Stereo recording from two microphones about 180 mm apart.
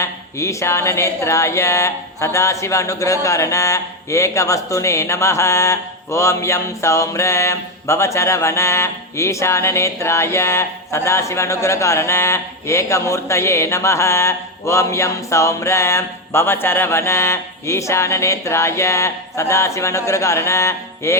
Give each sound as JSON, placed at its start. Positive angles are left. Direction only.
{"t": 0.0, "sound": "speech", "side_deg": 15}